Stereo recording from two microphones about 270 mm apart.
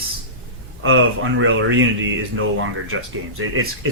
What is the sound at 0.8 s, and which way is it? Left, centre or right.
Speech, right.